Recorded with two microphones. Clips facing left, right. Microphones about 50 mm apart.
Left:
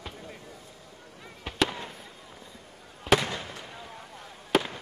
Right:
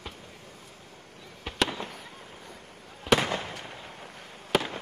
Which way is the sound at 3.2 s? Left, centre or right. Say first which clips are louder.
Right 3 dB; right.